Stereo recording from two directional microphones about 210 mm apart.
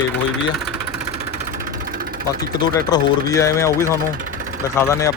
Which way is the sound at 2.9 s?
15° left (ahead or behind).